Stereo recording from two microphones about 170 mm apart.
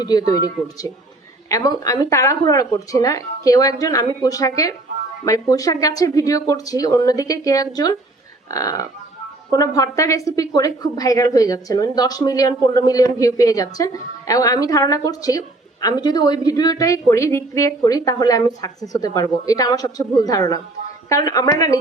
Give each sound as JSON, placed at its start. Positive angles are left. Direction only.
{"t": 0.3, "sound": "a woman's voice", "side_deg": 20}